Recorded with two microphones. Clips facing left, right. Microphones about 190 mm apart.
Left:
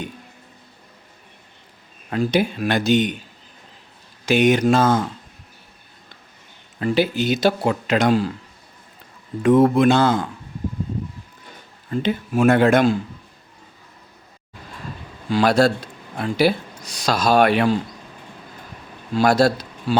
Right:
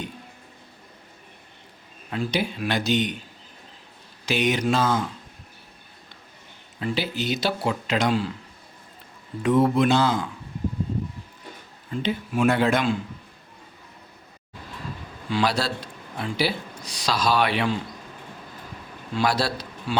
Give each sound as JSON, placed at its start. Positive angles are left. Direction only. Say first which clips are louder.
{"t": 2.0, "sound": "speech", "louder": "left 6 dB", "side_deg": 50}
{"t": 4.3, "sound": "speech", "louder": "left 7 dB", "side_deg": 50}
{"t": 6.7, "sound": "speech", "louder": "left 8 dB", "side_deg": 55}
{"t": 9.4, "sound": "speech", "louder": "left 5 dB", "side_deg": 50}
{"t": 11.9, "sound": "speech", "louder": "left 5 dB", "side_deg": 50}
{"t": 15.3, "sound": "speech", "louder": "left 8 dB", "side_deg": 45}
{"t": 19.1, "sound": "a man's voice", "louder": "left 8 dB", "side_deg": 45}